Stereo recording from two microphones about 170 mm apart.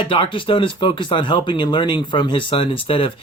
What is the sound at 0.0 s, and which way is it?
Speech, 30° left (ahead or behind).